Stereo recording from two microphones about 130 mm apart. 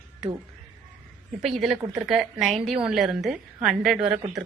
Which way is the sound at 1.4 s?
Centre (ahead or behind).